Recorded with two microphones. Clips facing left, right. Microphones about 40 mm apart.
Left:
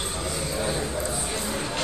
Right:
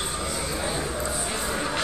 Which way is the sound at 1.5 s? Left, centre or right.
Right.